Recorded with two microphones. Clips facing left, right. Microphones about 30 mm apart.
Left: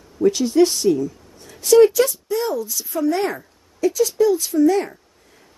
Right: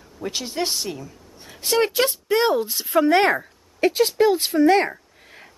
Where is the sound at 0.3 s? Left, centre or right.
Right.